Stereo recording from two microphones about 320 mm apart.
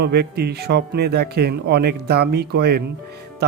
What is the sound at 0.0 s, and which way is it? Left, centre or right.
A man's voice, right.